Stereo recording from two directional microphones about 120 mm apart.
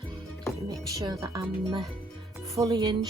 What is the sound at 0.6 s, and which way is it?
Music, 30° right (ahead or behind).